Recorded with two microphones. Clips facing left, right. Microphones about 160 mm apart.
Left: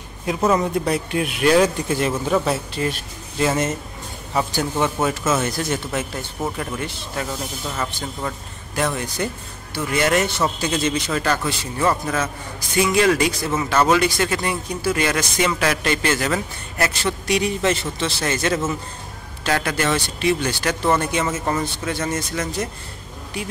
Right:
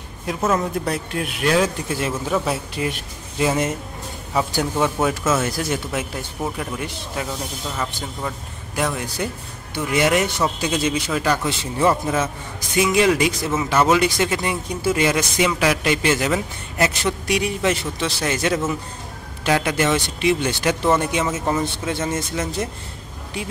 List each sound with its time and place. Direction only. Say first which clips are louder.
0.3 s speech: left 2 dB; centre (ahead or behind)
5.4 s speech: even; 5° right (ahead or behind)
12.1 s a man's voice: right 2 dB; 20° right (ahead or behind)